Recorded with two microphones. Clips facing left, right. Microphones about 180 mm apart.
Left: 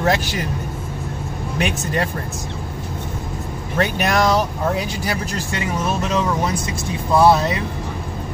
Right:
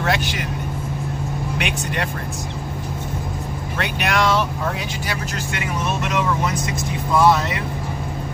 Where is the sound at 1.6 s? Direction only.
35° left (ahead or behind).